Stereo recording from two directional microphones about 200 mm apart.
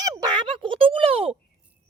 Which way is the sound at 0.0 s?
20° right (ahead or behind).